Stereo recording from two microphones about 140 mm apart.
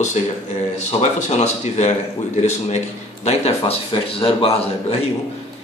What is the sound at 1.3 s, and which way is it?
Speech, 55° left (ahead or behind).